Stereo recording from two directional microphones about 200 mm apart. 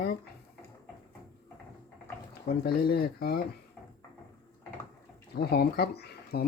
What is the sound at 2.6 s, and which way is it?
Speech, 50° left (ahead or behind).